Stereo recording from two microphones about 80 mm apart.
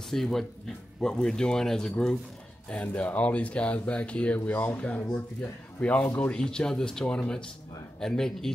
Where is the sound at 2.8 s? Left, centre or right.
Centre.